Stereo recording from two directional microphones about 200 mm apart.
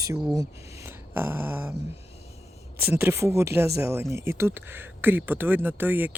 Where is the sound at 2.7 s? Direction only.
10° right (ahead or behind).